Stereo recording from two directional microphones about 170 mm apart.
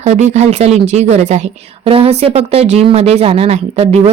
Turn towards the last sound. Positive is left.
turn(degrees=-35)  # may be behind; listen again after turning